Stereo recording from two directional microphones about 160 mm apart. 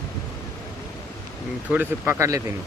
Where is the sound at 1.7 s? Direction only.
10° right (ahead or behind).